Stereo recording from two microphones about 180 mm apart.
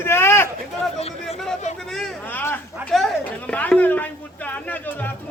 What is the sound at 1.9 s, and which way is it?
Speech, 5° left (ahead or behind).